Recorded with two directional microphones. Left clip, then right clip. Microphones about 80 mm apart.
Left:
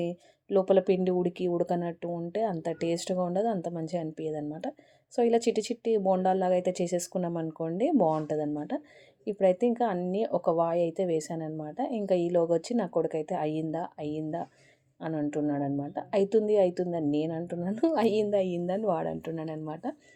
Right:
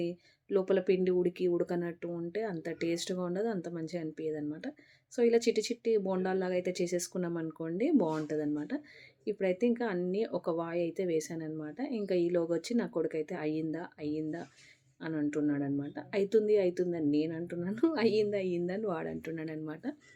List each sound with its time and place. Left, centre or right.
0.0 s a woman's voice: left
17.7 s speech: left
17.9 s speech: left